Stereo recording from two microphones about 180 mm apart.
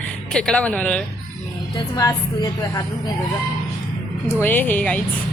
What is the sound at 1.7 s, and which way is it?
A woman's voice, 20° left (ahead or behind).